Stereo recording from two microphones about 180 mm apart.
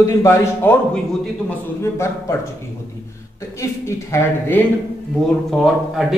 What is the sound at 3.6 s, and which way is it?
A man's voice, 15° left (ahead or behind).